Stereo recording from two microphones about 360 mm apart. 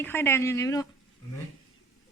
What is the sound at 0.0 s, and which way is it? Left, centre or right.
Speech, centre.